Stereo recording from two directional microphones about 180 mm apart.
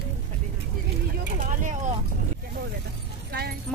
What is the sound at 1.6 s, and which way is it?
Vehicle, 45° right (ahead or behind).